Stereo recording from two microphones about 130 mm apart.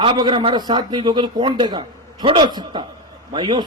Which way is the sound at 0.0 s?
40° right (ahead or behind).